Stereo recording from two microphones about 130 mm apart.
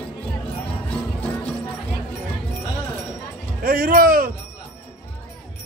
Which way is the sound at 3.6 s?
90° right.